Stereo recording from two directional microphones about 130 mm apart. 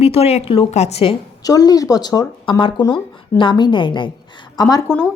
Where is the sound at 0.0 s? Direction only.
50° left (ahead or behind).